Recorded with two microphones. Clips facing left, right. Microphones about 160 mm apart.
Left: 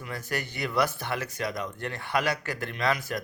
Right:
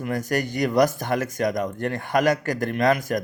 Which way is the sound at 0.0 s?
45° right (ahead or behind).